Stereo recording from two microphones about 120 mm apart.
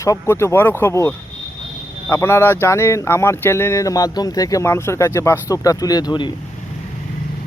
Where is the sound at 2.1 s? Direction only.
20° left (ahead or behind); by 6.3 s 35° left (ahead or behind).